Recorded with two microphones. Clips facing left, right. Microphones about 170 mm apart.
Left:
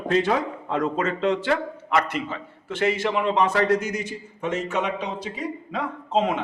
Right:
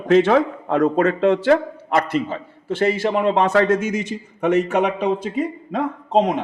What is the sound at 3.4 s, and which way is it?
A man's voice, 65° right (ahead or behind).